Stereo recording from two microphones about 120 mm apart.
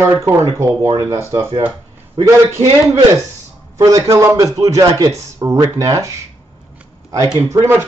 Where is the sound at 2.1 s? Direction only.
30° right (ahead or behind).